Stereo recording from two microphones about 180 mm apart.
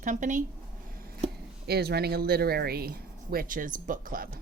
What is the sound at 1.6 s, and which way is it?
Speech, 60° right (ahead or behind).